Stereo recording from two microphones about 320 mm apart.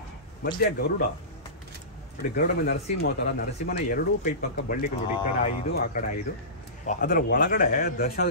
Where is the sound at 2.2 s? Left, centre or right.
Left.